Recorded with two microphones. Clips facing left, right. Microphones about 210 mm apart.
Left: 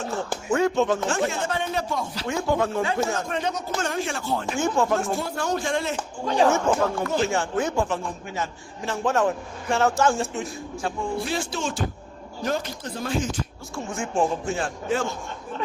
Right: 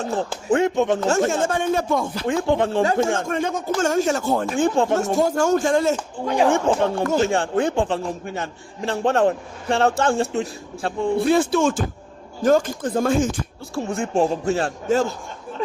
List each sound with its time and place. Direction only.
0.1 s a man's voice: 35° right (ahead or behind)
0.6 s speech: 20° right (ahead or behind)
1.0 s speech: 45° right (ahead or behind)
2.3 s a man's voice: 30° right (ahead or behind)
3.2 s speech: 50° right (ahead or behind)
4.5 s a man's voice: 30° right (ahead or behind)
5.1 s speech: 45° right (ahead or behind)
6.2 s speech: 15° right (ahead or behind)
6.5 s speech: 30° right (ahead or behind)
7.0 s speech: 45° right (ahead or behind)
7.3 s a man's voice: 35° right (ahead or behind)
11.3 s speech: 55° right (ahead or behind)
13.7 s a man's voice: 35° right (ahead or behind)